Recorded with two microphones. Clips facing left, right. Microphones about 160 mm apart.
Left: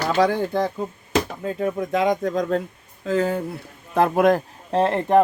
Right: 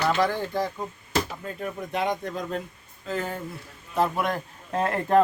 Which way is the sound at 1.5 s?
90° left.